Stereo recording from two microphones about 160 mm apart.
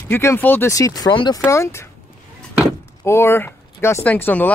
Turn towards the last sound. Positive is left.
turn(degrees=10)  # may be behind; listen again after turning